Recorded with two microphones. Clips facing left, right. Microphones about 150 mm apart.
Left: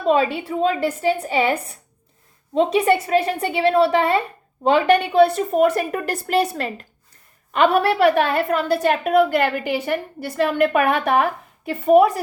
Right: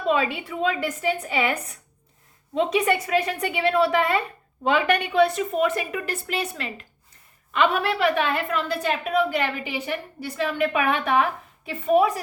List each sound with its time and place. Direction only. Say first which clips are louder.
0.0 s a woman's voice: left 5 dB; 35° left (ahead or behind); by 12.0 s 55° left (ahead or behind)